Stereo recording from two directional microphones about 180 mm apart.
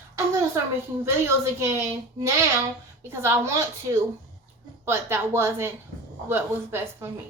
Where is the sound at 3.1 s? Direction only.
15° right (ahead or behind).